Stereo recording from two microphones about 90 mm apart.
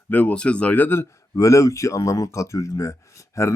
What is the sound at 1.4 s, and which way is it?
A man's voice, 35° left (ahead or behind).